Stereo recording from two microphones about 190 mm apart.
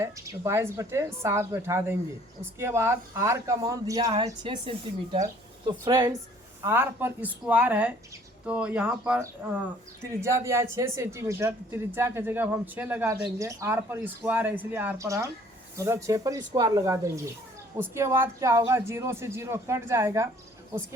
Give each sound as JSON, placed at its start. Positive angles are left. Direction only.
{"t": 0.0, "sound": "speech", "side_deg": -15}
{"t": 5.8, "sound": "speech", "side_deg": -20}